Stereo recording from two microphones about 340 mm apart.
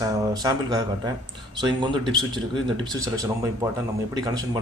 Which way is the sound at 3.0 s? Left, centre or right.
Centre.